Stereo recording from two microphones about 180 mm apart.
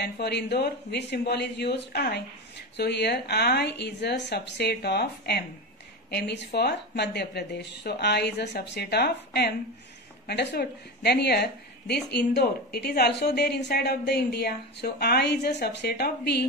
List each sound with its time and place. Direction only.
0.0 s a woman's voice: 65° left (ahead or behind)